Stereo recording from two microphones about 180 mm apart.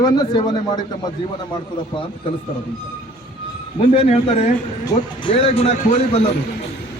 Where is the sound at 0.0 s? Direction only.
20° left (ahead or behind).